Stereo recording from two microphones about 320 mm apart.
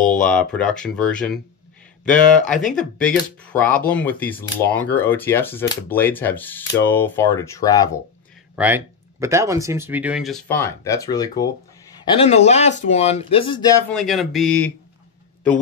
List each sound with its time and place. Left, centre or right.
0.5 s speech: centre
8.5 s speech: centre
13.9 s speech: centre